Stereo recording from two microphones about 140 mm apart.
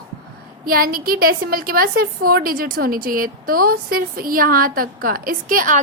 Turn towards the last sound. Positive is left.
turn(degrees=-80)